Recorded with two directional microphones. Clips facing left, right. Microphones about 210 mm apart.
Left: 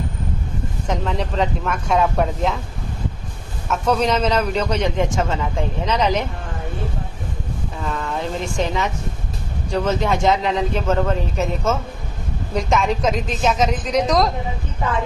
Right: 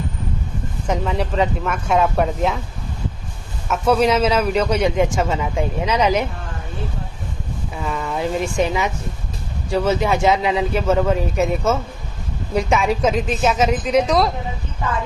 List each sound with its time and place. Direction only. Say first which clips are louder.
0.8 s speech: right 2 dB; 5° right (ahead or behind)
3.6 s a man's voice: right 3 dB; 5° right (ahead or behind)
7.8 s a man's voice: right 2 dB; 10° right (ahead or behind)